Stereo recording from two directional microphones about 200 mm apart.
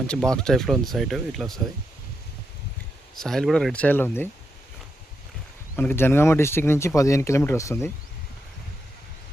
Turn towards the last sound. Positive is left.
turn(degrees=15)  # may be behind; listen again after turning